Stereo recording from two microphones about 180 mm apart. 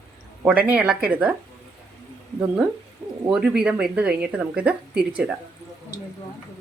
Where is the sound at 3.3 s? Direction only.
5° right (ahead or behind).